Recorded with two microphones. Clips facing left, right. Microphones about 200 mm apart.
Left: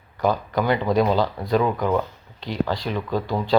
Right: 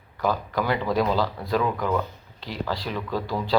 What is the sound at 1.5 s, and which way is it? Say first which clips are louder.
Speech: left 4 dB; 25° left (ahead or behind).